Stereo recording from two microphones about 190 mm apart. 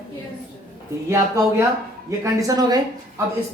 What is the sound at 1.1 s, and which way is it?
A man's voice, 15° right (ahead or behind).